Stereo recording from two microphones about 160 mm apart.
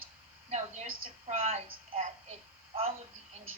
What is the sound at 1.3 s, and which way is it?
Speech, 40° right (ahead or behind).